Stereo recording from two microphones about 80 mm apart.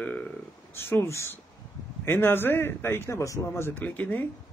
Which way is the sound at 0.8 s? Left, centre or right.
Left.